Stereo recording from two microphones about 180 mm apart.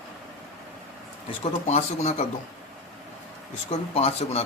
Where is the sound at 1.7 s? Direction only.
40° left (ahead or behind).